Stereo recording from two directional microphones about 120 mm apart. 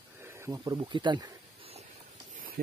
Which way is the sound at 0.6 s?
35° right (ahead or behind).